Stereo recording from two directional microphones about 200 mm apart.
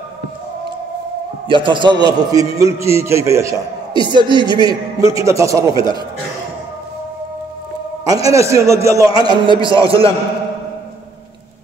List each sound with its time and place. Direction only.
1.5 s a man's voice: 25° right (ahead or behind)
8.1 s a man's voice: 15° right (ahead or behind)